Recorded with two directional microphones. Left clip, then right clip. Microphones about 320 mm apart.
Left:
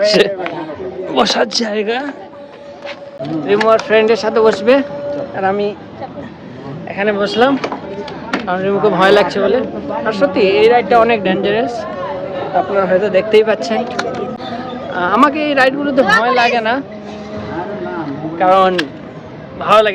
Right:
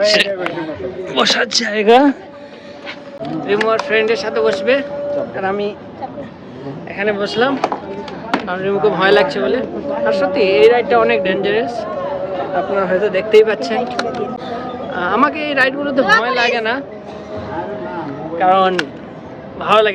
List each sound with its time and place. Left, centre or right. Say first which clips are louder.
0.0 s speech: left 1 dB; centre
3.4 s speech: left 4 dB; centre
5.4 s speech: left 7 dB; centre
6.9 s speech: left 3 dB; centre
13.8 s speech: even; centre
18.3 s speech: left 2 dB; centre